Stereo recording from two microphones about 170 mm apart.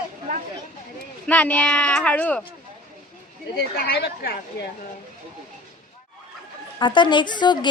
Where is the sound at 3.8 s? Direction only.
65° left (ahead or behind).